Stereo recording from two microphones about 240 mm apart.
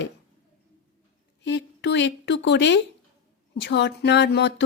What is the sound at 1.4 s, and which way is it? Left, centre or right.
A woman's voice, left.